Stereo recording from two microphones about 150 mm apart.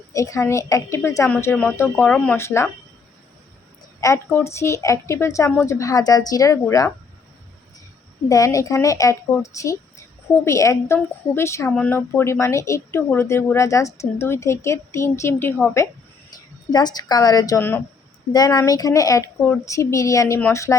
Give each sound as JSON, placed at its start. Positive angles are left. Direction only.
{"t": 0.1, "sound": "speech", "side_deg": 20}
{"t": 4.0, "sound": "speech", "side_deg": 15}
{"t": 8.3, "sound": "speech", "side_deg": 20}
{"t": 16.7, "sound": "speech", "side_deg": 25}
{"t": 17.6, "sound": "speech", "side_deg": 15}
{"t": 18.3, "sound": "speech", "side_deg": 25}